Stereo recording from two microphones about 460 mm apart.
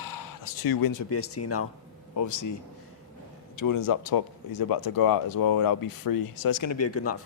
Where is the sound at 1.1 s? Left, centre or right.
Left.